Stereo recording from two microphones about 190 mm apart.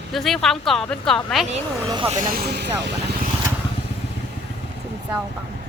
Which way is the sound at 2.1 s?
50° right (ahead or behind).